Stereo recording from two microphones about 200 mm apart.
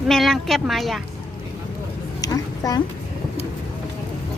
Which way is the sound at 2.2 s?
20° left (ahead or behind).